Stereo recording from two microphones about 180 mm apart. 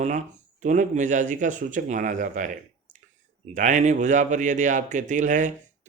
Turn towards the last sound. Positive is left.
turn(degrees=-45)  # may be behind; listen again after turning